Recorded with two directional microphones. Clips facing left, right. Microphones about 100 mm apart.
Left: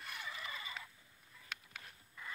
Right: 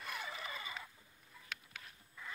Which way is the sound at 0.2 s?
30° right (ahead or behind).